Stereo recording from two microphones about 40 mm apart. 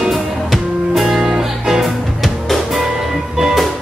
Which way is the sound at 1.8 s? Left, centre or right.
Centre.